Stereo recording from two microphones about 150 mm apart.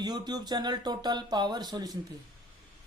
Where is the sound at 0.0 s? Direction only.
25° right (ahead or behind).